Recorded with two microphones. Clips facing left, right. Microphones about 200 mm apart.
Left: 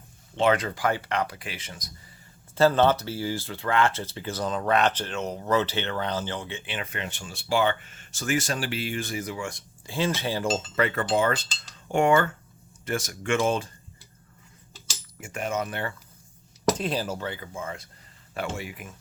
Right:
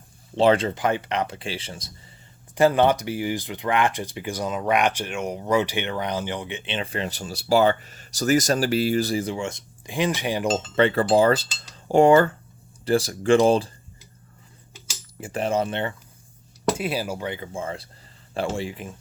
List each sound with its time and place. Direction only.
0.3 s speech: 30° right (ahead or behind)
2.6 s speech: 15° right (ahead or behind)
10.8 s speech: 30° right (ahead or behind)
15.2 s speech: 30° right (ahead or behind)
16.7 s speech: 10° right (ahead or behind); by 18.9 s 30° right (ahead or behind)